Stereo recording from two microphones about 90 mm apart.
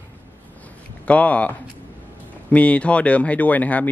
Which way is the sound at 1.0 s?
15° left (ahead or behind).